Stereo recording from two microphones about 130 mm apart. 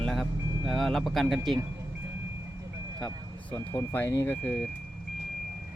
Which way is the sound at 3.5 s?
15° left (ahead or behind).